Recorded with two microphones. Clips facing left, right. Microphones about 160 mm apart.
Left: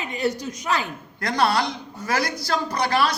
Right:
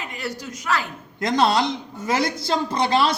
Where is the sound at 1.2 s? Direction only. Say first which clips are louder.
Right 2 dB; 20° right (ahead or behind).